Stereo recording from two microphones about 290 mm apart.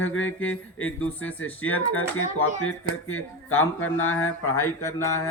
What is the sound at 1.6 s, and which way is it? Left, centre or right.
A woman's voice, left.